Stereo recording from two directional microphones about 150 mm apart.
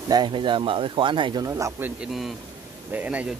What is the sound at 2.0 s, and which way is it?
Speech, centre (ahead or behind).